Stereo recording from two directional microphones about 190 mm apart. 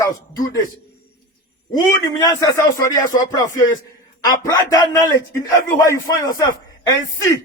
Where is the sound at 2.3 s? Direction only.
20° left (ahead or behind).